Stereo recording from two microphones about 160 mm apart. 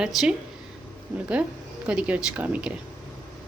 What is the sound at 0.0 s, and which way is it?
Speech, 5° right (ahead or behind).